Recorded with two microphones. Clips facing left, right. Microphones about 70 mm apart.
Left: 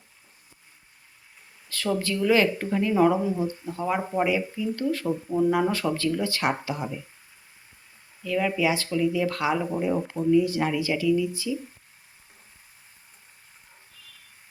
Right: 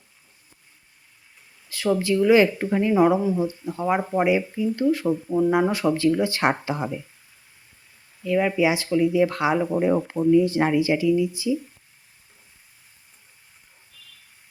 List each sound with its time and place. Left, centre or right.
1.7 s speech: centre; by 6.9 s right
8.2 s speech: right